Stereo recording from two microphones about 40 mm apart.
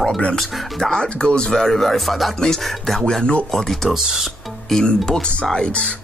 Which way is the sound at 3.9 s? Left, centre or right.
Centre.